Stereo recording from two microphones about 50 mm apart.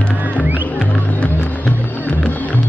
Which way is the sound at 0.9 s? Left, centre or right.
Left.